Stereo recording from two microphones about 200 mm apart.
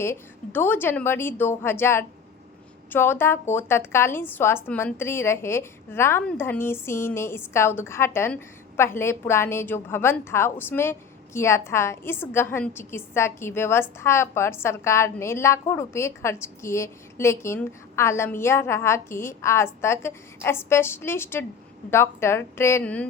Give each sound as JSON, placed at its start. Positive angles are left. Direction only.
{"t": 0.0, "sound": "a woman's voice", "side_deg": 10}